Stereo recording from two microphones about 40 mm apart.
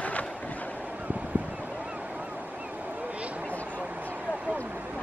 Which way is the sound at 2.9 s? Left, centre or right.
Right.